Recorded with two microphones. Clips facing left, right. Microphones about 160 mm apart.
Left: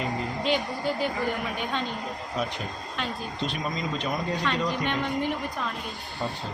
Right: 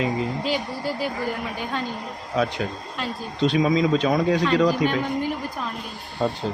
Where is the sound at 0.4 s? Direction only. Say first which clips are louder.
Right 1 dB; 5° right (ahead or behind).